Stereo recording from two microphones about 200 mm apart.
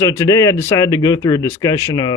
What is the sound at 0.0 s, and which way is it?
Speech, 15° left (ahead or behind).